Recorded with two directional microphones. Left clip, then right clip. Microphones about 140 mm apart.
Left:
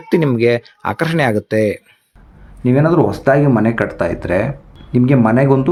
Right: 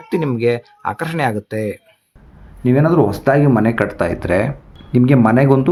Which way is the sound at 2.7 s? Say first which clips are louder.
Left 1 dB; 5° left (ahead or behind).